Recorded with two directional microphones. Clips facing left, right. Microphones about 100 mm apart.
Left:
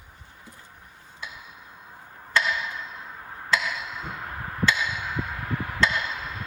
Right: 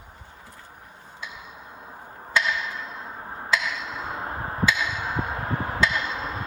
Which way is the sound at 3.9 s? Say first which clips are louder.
Right 4 dB; 35° right (ahead or behind).